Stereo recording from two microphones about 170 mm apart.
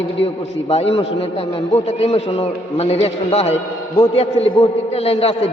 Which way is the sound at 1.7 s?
35° left (ahead or behind).